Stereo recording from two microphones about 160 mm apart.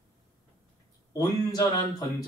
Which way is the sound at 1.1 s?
25° left (ahead or behind).